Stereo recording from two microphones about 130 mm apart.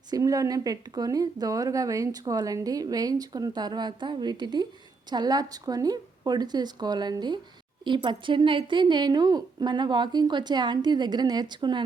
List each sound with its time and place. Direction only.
0.1 s a woman's voice: 25° right (ahead or behind)